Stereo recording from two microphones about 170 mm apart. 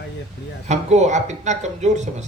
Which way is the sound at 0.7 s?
40° right (ahead or behind).